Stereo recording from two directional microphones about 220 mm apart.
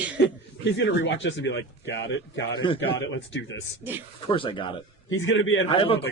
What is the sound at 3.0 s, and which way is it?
Speech, 55° left (ahead or behind).